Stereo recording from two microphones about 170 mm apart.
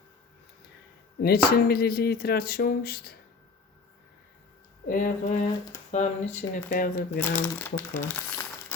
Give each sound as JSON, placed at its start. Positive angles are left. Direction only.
{"t": 1.2, "sound": "speech", "side_deg": 65}
{"t": 4.9, "sound": "speech", "side_deg": 50}
{"t": 7.2, "sound": "speech", "side_deg": 10}